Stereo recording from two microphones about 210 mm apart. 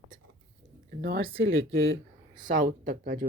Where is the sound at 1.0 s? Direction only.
45° right (ahead or behind).